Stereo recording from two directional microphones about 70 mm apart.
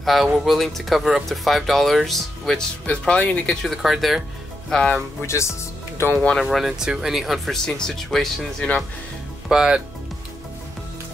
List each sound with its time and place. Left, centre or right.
0.0 s speech: centre
2.9 s speech: centre
3.4 s speech: centre
5.2 s speech: left
6.5 s speech: centre
9.5 s speech: centre